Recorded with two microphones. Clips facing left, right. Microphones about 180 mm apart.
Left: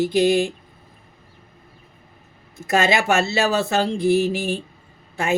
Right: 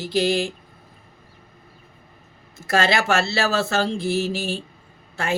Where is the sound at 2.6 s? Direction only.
15° left (ahead or behind).